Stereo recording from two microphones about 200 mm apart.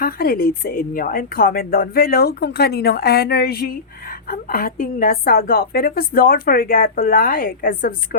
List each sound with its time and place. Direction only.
0.0 s a woman's voice: 50° left (ahead or behind)